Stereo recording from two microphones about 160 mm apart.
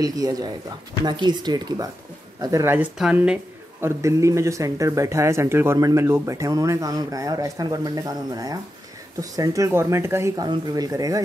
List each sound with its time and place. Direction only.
0.0 s speech: 25° right (ahead or behind); by 3.3 s 5° right (ahead or behind)
3.8 s speech: 20° right (ahead or behind)